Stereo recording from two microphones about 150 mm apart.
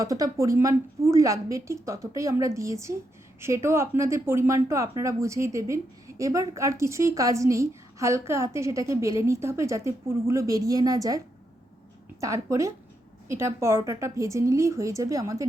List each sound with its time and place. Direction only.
0.0 s speech: 20° right (ahead or behind)
12.2 s speech: 20° right (ahead or behind)